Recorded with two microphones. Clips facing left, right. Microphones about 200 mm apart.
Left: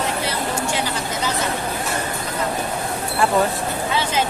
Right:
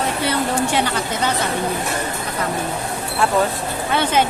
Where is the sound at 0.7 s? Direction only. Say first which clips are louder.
Right 3 dB; 60° right (ahead or behind).